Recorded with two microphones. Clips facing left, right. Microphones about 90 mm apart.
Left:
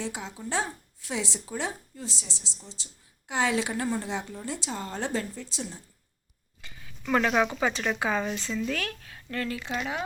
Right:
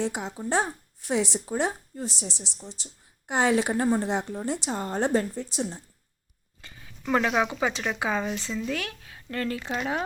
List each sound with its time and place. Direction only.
0.0 s a woman's voice: 60° right (ahead or behind)
0.3 s a woman's voice: 45° right (ahead or behind)
6.6 s a sound: 30° right (ahead or behind)
7.0 s speech: 15° right (ahead or behind)
9.3 s speech: 30° right (ahead or behind)